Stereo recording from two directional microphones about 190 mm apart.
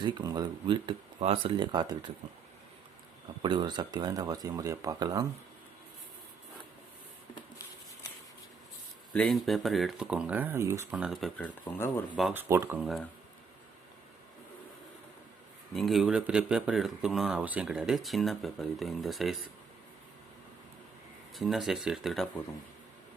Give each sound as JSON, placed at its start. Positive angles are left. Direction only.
{"t": 0.0, "sound": "speech", "side_deg": -20}
{"t": 3.4, "sound": "speech", "side_deg": -25}
{"t": 9.1, "sound": "speech", "side_deg": 0}
{"t": 10.9, "sound": "speech", "side_deg": 0}
{"t": 12.3, "sound": "speech", "side_deg": -10}
{"t": 15.7, "sound": "speech", "side_deg": 0}
{"t": 21.3, "sound": "speech", "side_deg": 0}